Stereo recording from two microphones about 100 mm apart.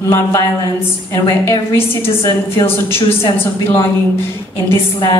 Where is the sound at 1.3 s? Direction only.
25° left (ahead or behind).